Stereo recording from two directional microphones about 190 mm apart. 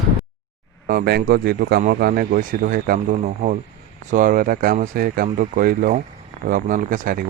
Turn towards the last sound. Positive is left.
turn(degrees=-45)  # may be behind; listen again after turning